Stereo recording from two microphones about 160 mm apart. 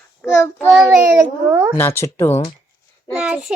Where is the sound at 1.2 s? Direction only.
15° right (ahead or behind).